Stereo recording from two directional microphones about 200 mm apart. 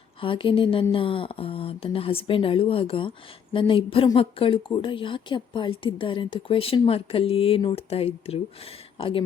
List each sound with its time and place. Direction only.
0.2 s speech: 25° left (ahead or behind)